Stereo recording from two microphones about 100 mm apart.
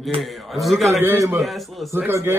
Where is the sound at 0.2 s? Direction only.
Centre (ahead or behind).